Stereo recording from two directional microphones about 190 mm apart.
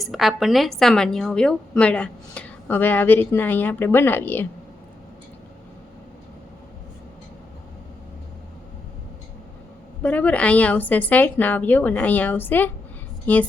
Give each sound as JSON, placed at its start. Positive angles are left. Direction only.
{"t": 0.0, "sound": "a woman's voice", "side_deg": 0}
{"t": 10.0, "sound": "a woman's voice", "side_deg": 10}